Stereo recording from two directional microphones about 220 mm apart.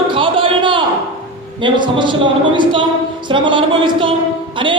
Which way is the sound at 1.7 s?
20° right (ahead or behind).